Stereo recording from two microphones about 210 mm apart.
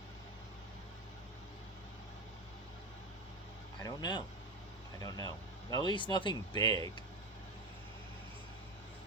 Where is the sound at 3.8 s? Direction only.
20° left (ahead or behind).